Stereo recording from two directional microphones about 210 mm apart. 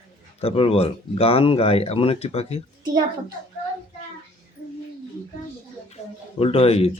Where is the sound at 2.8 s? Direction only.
20° right (ahead or behind).